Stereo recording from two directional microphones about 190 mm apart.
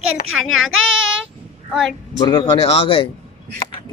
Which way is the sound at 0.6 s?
90° right.